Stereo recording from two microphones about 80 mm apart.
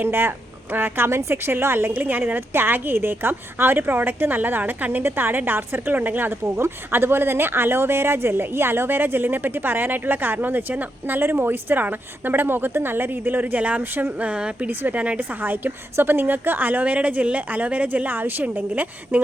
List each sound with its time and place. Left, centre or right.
0.0 s a woman's voice: right
14.7 s a woman's voice: right